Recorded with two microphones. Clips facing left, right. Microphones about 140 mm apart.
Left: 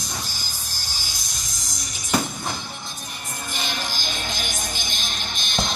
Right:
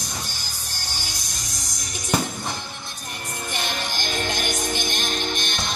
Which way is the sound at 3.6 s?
60° right (ahead or behind).